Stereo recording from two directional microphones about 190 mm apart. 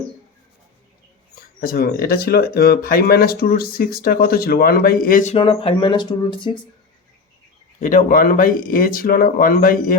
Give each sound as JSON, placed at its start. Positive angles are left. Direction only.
{"t": 1.6, "sound": "speech", "side_deg": 50}
{"t": 7.8, "sound": "speech", "side_deg": 45}